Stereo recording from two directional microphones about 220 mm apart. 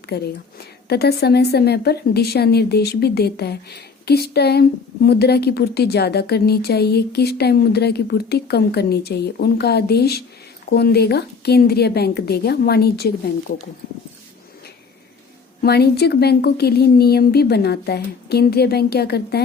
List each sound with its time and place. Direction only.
0.1 s speech: 45° left (ahead or behind)
15.6 s speech: 45° left (ahead or behind)